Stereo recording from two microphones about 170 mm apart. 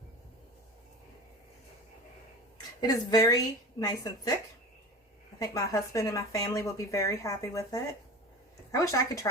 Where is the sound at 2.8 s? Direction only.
20° left (ahead or behind).